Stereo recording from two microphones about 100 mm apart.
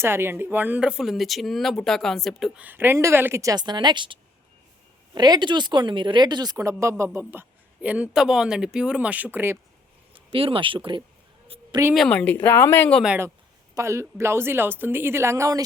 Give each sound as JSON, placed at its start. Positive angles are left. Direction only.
{"t": 0.0, "sound": "speech", "side_deg": -25}
{"t": 2.6, "sound": "speech", "side_deg": -20}
{"t": 3.4, "sound": "speech", "side_deg": -45}
{"t": 10.1, "sound": "speech", "side_deg": -60}
{"t": 11.9, "sound": "speech", "side_deg": 10}
{"t": 13.7, "sound": "speech", "side_deg": -30}